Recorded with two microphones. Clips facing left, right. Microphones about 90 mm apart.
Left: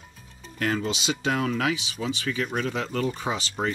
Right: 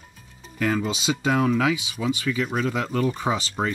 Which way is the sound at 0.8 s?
15° right (ahead or behind).